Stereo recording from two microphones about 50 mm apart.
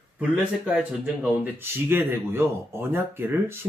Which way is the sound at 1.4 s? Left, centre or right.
Right.